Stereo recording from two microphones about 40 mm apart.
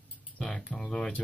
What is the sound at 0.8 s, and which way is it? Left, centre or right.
Speech, left.